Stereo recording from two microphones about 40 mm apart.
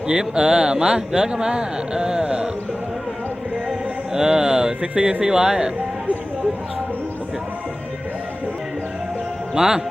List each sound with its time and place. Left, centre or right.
0.1 s speech: centre
3.7 s mantra: centre
4.8 s speech: right
9.6 s speech: centre